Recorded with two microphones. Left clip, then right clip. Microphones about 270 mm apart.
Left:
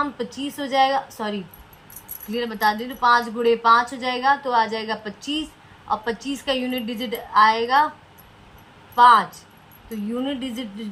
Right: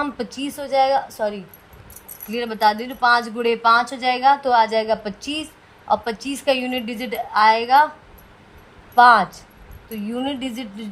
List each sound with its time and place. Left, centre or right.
0.2 s a woman's voice: right
9.0 s a woman's voice: right
10.2 s a woman's voice: right